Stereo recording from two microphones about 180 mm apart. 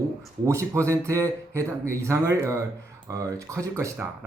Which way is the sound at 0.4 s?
15° right (ahead or behind).